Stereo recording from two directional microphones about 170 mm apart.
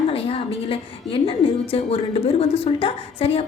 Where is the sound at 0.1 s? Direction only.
35° left (ahead or behind).